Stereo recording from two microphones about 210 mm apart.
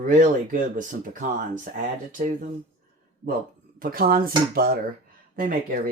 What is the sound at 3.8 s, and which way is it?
Speech, 45° right (ahead or behind).